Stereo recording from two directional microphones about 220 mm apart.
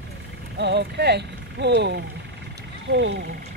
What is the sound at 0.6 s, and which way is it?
Speech, 50° right (ahead or behind).